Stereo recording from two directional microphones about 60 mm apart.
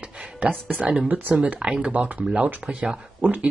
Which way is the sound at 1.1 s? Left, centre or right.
Right.